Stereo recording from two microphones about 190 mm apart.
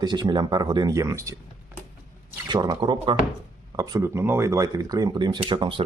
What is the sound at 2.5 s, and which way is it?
Speech, 20° right (ahead or behind).